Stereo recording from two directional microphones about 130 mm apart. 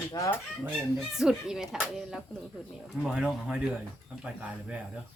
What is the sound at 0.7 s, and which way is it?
Speech, 5° right (ahead or behind).